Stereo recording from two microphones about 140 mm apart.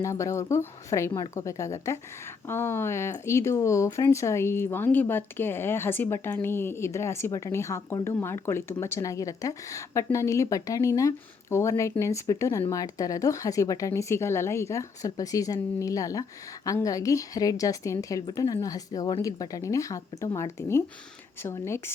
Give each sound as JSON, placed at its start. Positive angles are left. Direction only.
{"t": 0.0, "sound": "speech", "side_deg": 20}